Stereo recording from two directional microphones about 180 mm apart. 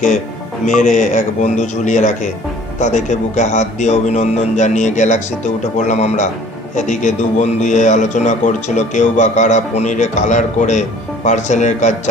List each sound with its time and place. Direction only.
0.7 s a man's voice: 45° left (ahead or behind)